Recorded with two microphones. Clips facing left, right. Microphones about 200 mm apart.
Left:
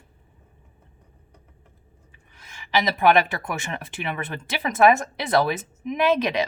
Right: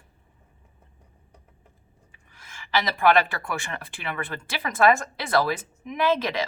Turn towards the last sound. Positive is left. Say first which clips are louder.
# left 3 dB
turn(degrees=20)  # may be behind; listen again after turning